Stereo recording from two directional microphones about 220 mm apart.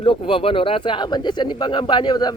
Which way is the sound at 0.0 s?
25° left (ahead or behind).